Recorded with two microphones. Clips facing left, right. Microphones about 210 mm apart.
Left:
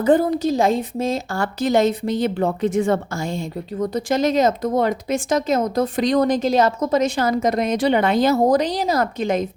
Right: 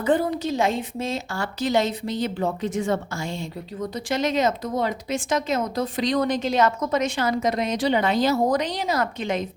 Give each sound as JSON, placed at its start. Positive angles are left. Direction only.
{"t": 0.0, "sound": "a woman's voice", "side_deg": 40}
{"t": 8.4, "sound": "speech", "side_deg": 35}